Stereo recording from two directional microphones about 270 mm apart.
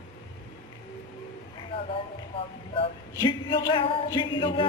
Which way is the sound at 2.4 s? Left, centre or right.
Centre.